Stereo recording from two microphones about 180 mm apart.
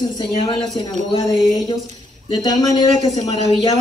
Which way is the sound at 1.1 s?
25° left (ahead or behind).